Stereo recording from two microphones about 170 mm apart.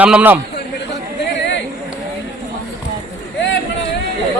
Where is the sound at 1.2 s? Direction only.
90° left.